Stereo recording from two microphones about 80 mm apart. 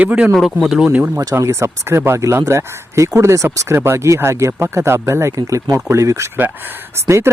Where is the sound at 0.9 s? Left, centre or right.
Centre.